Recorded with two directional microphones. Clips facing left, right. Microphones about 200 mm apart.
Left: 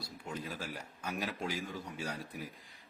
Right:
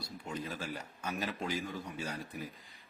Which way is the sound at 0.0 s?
10° left (ahead or behind).